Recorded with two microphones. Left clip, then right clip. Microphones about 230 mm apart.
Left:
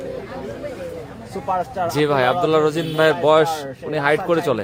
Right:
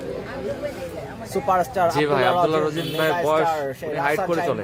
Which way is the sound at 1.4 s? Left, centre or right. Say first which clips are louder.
Right 2 dB; right.